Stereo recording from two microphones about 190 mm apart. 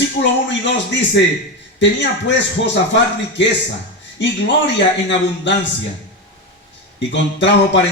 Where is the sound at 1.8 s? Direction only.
70° left (ahead or behind).